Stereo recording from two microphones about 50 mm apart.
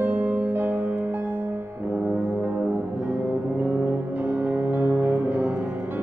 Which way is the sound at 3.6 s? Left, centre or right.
Right.